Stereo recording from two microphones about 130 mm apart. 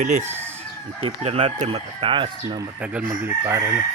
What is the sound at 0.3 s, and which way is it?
Chicken, 15° right (ahead or behind).